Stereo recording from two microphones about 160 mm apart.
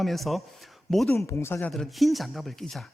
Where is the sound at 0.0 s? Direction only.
Centre (ahead or behind).